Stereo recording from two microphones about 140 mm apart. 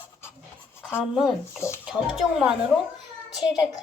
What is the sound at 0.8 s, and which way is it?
Writing, 15° left (ahead or behind).